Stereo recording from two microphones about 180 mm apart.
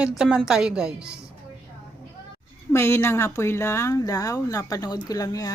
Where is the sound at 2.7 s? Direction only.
15° left (ahead or behind).